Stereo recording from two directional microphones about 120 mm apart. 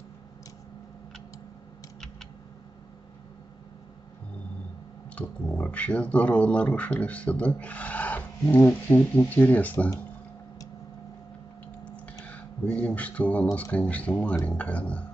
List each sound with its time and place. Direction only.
5.1 s speech: 10° left (ahead or behind)
12.7 s speech: 10° left (ahead or behind)